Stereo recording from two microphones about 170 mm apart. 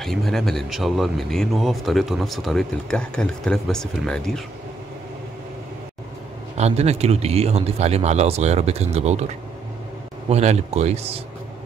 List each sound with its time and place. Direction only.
0.0 s speech: centre (ahead or behind)
6.5 s a man's voice: 40° right (ahead or behind)
10.3 s a man's voice: 40° right (ahead or behind)